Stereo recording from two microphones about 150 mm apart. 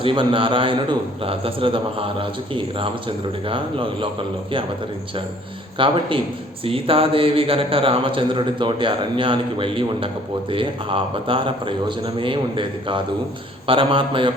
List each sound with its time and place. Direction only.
0.0 s speech: 35° right (ahead or behind)
5.7 s speech: 35° right (ahead or behind)